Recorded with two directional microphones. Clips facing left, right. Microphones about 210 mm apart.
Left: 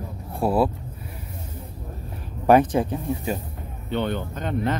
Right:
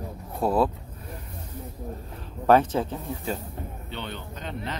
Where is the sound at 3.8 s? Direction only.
50° left (ahead or behind).